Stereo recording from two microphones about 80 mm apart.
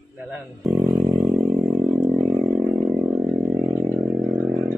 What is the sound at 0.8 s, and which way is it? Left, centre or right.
Vehicle, right.